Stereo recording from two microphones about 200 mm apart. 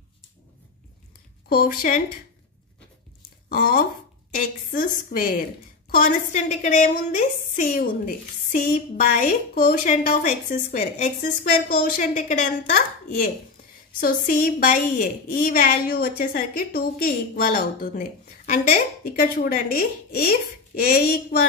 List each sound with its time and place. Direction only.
1.5 s a woman's voice: 45° left (ahead or behind)
3.4 s a woman's voice: 40° left (ahead or behind)